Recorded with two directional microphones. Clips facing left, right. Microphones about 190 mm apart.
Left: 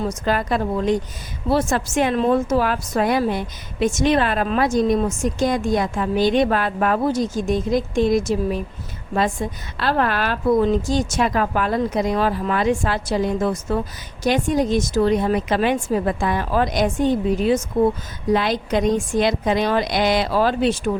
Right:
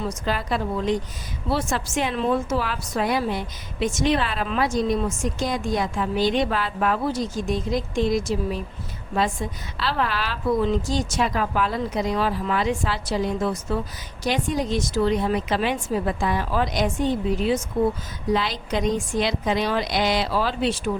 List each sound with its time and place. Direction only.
0.0 s a woman's voice: 50° left (ahead or behind)